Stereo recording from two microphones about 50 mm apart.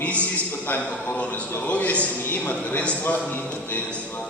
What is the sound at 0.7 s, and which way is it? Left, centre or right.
A man's voice, left.